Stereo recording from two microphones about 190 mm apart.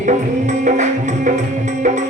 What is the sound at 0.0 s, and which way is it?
Music, 40° right (ahead or behind).